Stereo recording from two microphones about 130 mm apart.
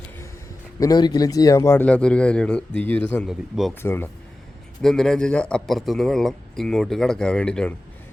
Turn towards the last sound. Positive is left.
turn(degrees=5)  # may be behind; listen again after turning